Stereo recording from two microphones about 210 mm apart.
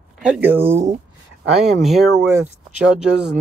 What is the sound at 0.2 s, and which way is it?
Speech, 5° right (ahead or behind).